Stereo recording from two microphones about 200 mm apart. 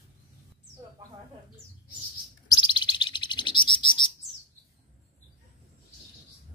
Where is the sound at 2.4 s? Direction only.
25° left (ahead or behind).